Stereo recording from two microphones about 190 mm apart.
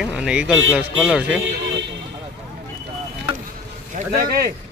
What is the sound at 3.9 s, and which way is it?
Speech, 50° right (ahead or behind).